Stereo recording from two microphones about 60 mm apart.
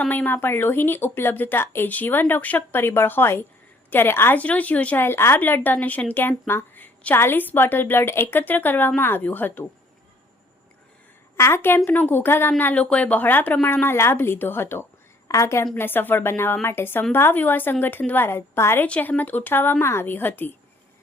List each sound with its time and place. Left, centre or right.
0.1 s a woman's voice: left
2.7 s a woman's voice: left
4.4 s speech: left
4.9 s a woman's voice: left
5.4 s a woman's voice: left
6.7 s a sound: left
7.2 s a woman's voice: left
11.3 s a woman's voice: left
13.8 s a woman's voice: left
15.3 s a woman's voice: left
15.7 s a woman's voice: left
18.3 s a woman's voice: left
18.9 s speech: left
19.8 s a woman's voice: left